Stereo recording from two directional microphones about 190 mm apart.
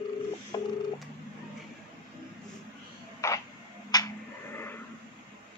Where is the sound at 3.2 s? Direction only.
15° left (ahead or behind).